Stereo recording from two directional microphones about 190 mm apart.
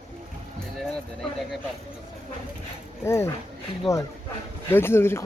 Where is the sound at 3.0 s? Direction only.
15° left (ahead or behind).